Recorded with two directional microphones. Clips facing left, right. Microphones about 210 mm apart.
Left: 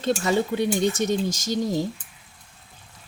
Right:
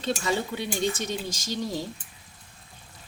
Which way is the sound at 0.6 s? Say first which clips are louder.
Left 6 dB; 45° left (ahead or behind).